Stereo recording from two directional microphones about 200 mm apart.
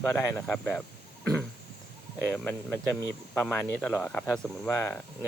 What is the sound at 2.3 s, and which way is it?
A man's voice, 5° left (ahead or behind).